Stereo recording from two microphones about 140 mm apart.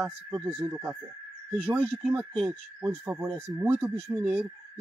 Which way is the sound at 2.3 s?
5° left (ahead or behind).